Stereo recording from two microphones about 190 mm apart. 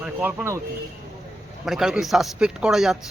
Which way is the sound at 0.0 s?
10° right (ahead or behind).